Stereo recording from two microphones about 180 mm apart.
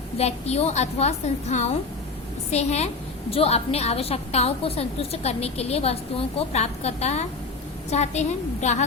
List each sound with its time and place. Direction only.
0.2 s a woman's voice: 35° left (ahead or behind)